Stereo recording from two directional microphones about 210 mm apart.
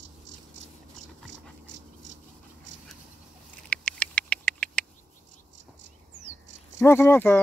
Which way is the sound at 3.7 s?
5° left (ahead or behind).